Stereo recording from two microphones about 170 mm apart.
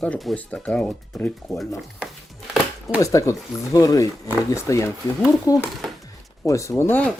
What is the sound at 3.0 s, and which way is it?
Speech, 20° left (ahead or behind).